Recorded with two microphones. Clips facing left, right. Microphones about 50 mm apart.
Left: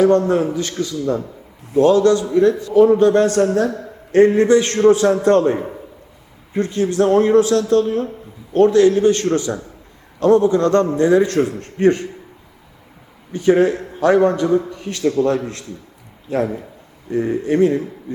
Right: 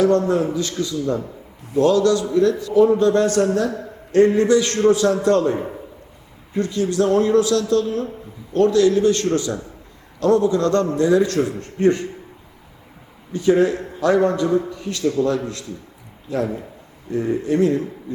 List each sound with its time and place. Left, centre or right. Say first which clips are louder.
0.5 s a man's voice: left 1 dB; left
5.5 s a man's voice: left 1 dB; centre
6.5 s a man's voice: left 2 dB; left
13.3 s a man's voice: left 2 dB; left